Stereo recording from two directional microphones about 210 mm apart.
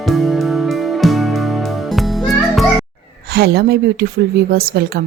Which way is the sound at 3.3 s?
50° right (ahead or behind).